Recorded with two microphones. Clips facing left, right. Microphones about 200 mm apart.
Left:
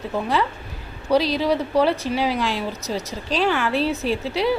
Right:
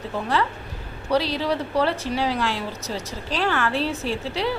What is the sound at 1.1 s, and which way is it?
A woman's voice, 15° left (ahead or behind).